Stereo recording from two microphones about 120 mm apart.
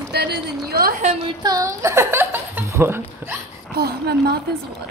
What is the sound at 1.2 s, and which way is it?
A woman's voice, 35° right (ahead or behind).